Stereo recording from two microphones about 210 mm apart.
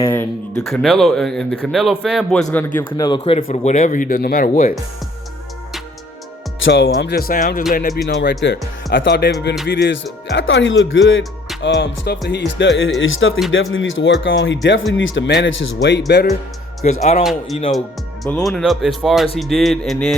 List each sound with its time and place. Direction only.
0.0 s speech: 10° left (ahead or behind)
3.1 s speech: 25° left (ahead or behind)
6.7 s speech: 60° left (ahead or behind); by 7.9 s 40° left (ahead or behind)
8.0 s speech: 55° left (ahead or behind)
17.0 s speech: 30° left (ahead or behind)
17.7 s speech: centre (ahead or behind)